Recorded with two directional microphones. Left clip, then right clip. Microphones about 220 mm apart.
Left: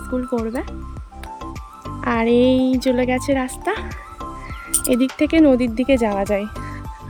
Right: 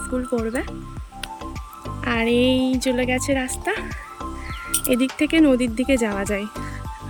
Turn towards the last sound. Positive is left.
turn(degrees=5)  # may be behind; listen again after turning